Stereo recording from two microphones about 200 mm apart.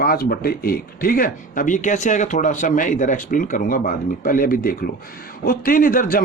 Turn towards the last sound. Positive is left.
turn(degrees=45)  # may be behind; listen again after turning